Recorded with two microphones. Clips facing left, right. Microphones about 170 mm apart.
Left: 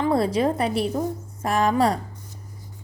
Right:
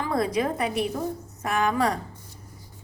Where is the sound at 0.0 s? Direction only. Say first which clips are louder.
Left 4 dB; 30° left (ahead or behind).